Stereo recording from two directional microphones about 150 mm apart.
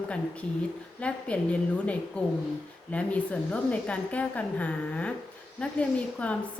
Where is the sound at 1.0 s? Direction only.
10° left (ahead or behind).